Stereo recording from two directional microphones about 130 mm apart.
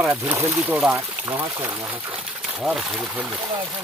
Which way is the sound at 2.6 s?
Centre (ahead or behind).